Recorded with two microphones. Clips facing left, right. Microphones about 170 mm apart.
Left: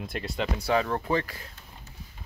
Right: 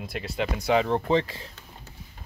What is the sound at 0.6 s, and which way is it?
Speech, 20° right (ahead or behind).